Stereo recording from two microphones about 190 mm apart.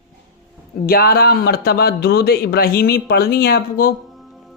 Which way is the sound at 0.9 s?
55° left (ahead or behind).